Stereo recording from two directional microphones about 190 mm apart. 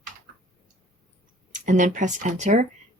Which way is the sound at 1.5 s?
40° right (ahead or behind).